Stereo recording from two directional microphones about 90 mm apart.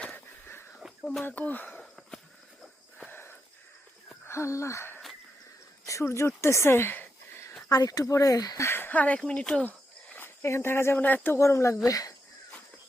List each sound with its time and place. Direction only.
0.4 s a sound: 25° left (ahead or behind)
1.2 s speech: 20° left (ahead or behind)
1.8 s walk: 5° left (ahead or behind)
3.1 s wheeze: 25° left (ahead or behind)
4.3 s speech: 30° left (ahead or behind)
7.7 s speech: 40° left (ahead or behind)
8.6 s speech: 25° left (ahead or behind); by 12.1 s 40° left (ahead or behind)